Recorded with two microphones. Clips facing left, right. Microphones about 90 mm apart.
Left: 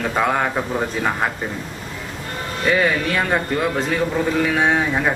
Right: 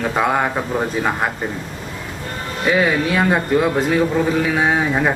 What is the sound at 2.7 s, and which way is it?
Speech, 10° right (ahead or behind).